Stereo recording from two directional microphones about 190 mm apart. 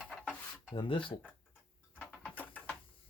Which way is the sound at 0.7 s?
25° left (ahead or behind).